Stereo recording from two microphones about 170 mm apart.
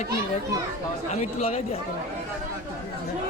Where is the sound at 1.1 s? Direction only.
40° left (ahead or behind).